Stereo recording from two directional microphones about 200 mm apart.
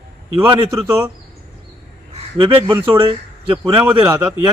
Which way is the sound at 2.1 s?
25° right (ahead or behind).